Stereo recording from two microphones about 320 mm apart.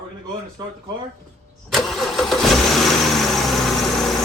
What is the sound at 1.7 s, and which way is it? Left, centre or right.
Vehicle, centre.